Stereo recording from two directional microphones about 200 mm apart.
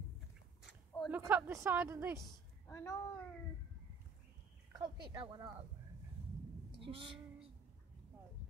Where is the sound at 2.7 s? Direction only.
15° left (ahead or behind).